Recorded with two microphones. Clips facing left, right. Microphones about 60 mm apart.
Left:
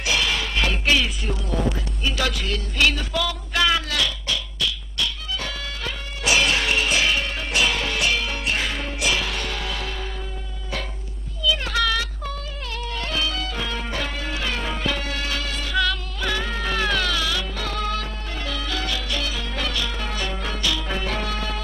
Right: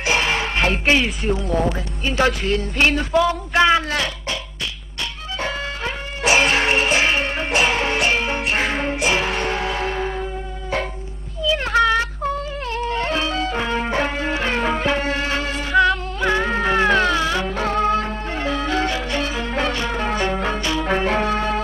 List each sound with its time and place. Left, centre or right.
0.0 s music: right
1.7 s a sound: right
11.4 s music: right